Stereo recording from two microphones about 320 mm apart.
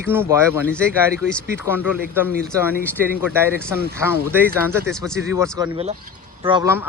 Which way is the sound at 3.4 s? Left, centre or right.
Centre.